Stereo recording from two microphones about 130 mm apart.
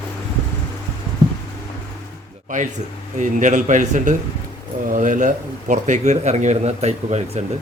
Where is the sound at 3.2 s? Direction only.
75° right (ahead or behind); by 7.4 s 55° right (ahead or behind).